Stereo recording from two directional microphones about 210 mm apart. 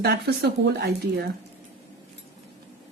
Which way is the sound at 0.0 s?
50° right (ahead or behind).